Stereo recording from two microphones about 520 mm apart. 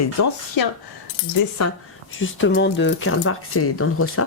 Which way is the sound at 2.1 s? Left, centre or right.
Left.